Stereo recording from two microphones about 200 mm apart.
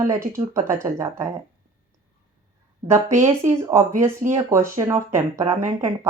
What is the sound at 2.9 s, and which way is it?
Speech, 15° right (ahead or behind).